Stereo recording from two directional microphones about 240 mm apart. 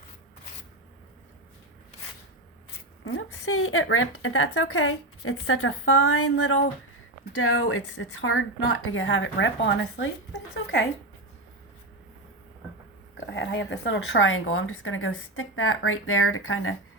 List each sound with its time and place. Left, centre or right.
3.0 s speech: left
13.1 s speech: left